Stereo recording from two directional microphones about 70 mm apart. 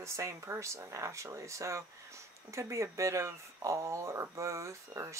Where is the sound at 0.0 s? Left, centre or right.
Right.